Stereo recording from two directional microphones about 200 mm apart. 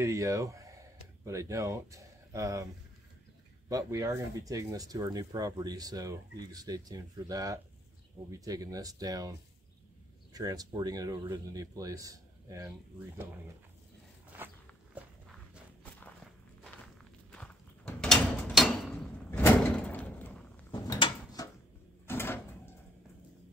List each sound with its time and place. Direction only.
0.0 s speech: 15° right (ahead or behind)
10.3 s speech: 20° right (ahead or behind)
17.3 s a sound: 5° left (ahead or behind)
19.4 s door: 5° left (ahead or behind)
20.7 s mechanisms: 20° left (ahead or behind)
22.0 s a sound: 10° left (ahead or behind)